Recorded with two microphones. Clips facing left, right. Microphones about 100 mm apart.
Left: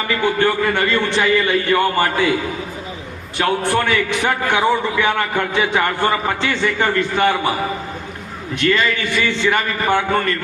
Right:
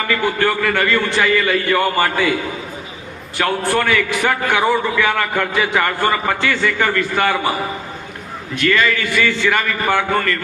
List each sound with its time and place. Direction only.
0.1 s a man's voice: 25° left (ahead or behind)
3.3 s a man's voice: 20° left (ahead or behind)
8.5 s a man's voice: 20° left (ahead or behind)